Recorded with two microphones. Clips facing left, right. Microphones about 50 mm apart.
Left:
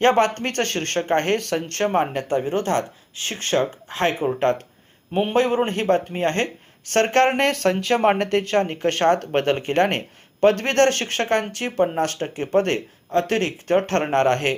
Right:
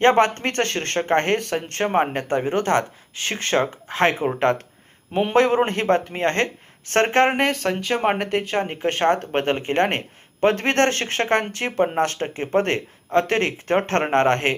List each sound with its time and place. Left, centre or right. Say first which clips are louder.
0.0 s speech: right 1 dB; right
1.5 s speech: left 1 dB; right
2.1 s speech: even; right
5.1 s a man's voice: right 2 dB; right
6.9 s speech: even; right